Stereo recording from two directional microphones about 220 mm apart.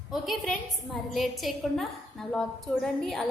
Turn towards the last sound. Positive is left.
turn(degrees=0)  # may be behind; listen again after turning